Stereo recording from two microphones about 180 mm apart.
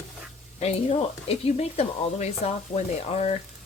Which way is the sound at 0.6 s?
35° left (ahead or behind).